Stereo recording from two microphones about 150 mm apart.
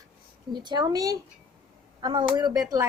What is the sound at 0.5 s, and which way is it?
A woman's voice, 30° right (ahead or behind).